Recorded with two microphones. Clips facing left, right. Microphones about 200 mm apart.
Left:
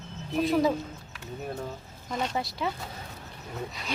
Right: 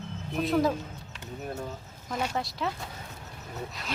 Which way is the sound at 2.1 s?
Centre (ahead or behind).